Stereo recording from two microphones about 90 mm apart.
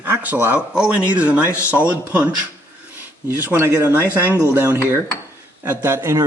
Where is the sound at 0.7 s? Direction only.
10° right (ahead or behind).